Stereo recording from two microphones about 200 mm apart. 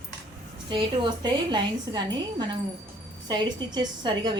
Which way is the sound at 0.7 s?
25° right (ahead or behind).